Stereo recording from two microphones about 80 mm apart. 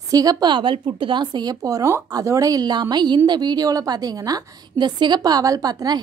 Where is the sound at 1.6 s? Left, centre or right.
Right.